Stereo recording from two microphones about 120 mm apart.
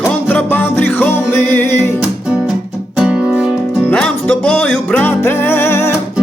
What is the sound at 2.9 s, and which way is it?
Music, 5° right (ahead or behind).